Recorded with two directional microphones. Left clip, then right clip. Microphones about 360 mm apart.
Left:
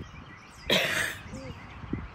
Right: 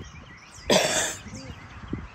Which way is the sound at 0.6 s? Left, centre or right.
Centre.